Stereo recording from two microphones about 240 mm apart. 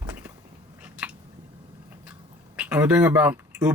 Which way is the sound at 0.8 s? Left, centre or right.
Centre.